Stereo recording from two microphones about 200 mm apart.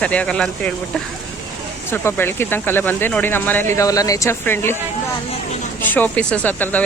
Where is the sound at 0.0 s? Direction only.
5° left (ahead or behind).